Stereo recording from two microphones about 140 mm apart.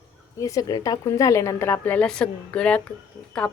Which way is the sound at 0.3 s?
25° left (ahead or behind).